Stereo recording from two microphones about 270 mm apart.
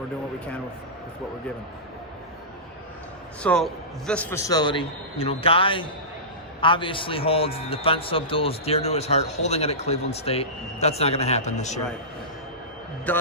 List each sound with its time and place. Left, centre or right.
3.4 s a man's voice: centre; by 11.8 s left
13.1 s a man's voice: centre